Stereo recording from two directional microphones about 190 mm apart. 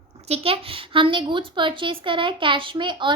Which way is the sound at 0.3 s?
30° right (ahead or behind).